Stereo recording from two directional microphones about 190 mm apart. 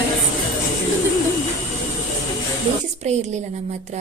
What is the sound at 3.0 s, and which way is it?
Speech, 35° right (ahead or behind).